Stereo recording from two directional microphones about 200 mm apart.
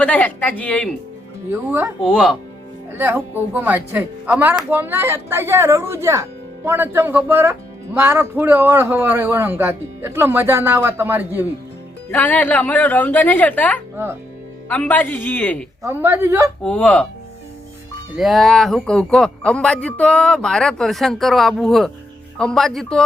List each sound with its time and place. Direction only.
0.0 s a woman's voice: 5° left (ahead or behind)
2.0 s a man's voice: centre (ahead or behind)
3.0 s a man's voice: 10° right (ahead or behind)
12.1 s a woman's voice: 10° left (ahead or behind)
13.9 s speech: 10° right (ahead or behind)
14.7 s a woman's voice: 5° left (ahead or behind)
15.8 s a man's voice: 15° right (ahead or behind)
16.6 s a woman's voice: 5° left (ahead or behind)
18.2 s a man's voice: centre (ahead or behind)